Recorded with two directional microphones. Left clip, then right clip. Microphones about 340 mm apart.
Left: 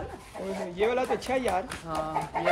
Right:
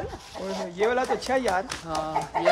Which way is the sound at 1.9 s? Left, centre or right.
Right.